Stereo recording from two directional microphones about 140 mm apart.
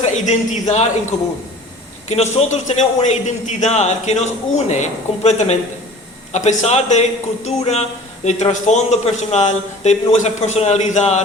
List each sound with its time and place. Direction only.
0.0 s speech: 55° left (ahead or behind)
2.0 s a man's voice: 55° left (ahead or behind)